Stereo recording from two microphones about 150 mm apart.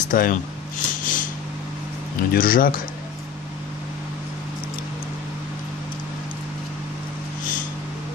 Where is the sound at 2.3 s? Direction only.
70° left (ahead or behind).